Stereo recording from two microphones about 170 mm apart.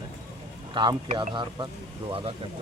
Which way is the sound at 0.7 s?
25° right (ahead or behind).